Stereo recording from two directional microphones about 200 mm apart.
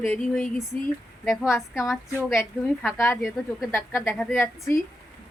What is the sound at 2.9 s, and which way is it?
Speech, 15° left (ahead or behind).